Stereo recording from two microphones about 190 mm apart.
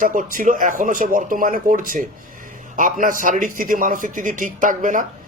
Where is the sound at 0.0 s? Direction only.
45° right (ahead or behind).